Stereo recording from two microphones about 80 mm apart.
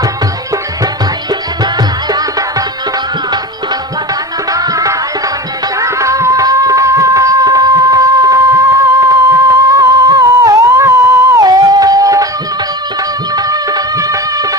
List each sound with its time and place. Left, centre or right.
1.3 s music: right
4.5 s music: right
9.7 s humming: right
10.8 s music: right
13.3 s music: right